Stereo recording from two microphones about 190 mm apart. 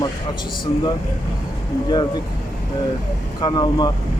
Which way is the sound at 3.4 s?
20° left (ahead or behind).